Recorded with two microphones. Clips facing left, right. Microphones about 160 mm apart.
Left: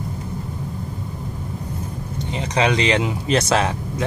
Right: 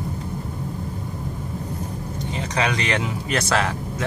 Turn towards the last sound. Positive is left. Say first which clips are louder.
# left 2 dB
turn(degrees=20)  # may be behind; listen again after turning